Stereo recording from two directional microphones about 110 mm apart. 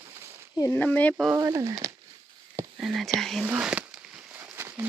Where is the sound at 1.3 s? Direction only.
35° right (ahead or behind).